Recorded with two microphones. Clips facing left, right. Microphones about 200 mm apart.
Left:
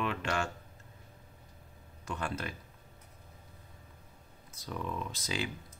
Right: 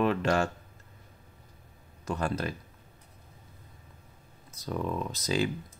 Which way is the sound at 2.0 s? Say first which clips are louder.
Right 6 dB; 40° right (ahead or behind).